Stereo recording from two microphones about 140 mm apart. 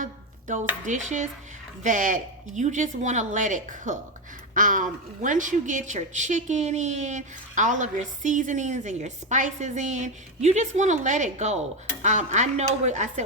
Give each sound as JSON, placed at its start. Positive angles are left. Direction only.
{"t": 0.0, "sound": "chopping", "side_deg": -65}
{"t": 0.9, "sound": "a woman's voice", "side_deg": -60}